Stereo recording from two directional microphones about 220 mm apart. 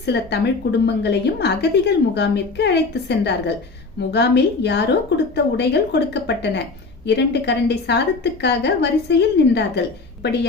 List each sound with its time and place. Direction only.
0.0 s a woman's voice: 50° left (ahead or behind)